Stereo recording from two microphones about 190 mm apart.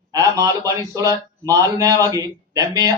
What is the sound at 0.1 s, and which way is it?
A man's voice, 20° right (ahead or behind).